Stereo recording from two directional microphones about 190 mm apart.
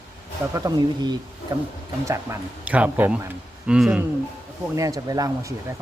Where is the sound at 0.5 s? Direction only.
20° right (ahead or behind).